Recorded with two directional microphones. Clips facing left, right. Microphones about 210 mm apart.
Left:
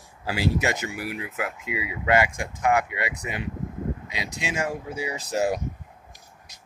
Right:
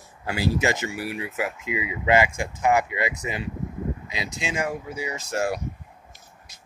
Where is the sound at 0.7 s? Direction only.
5° right (ahead or behind).